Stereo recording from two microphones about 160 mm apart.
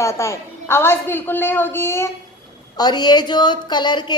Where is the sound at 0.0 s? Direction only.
20° left (ahead or behind).